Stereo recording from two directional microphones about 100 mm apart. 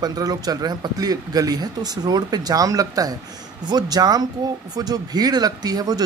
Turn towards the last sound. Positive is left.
turn(degrees=-40)  # may be behind; listen again after turning